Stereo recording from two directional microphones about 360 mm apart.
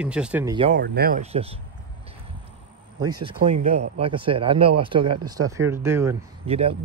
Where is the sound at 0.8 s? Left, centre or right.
Right.